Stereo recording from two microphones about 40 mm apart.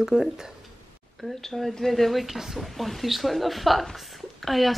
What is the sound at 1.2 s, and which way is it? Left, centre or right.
A woman's voice, centre.